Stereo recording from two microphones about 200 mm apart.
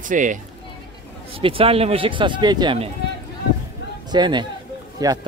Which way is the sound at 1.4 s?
25° right (ahead or behind).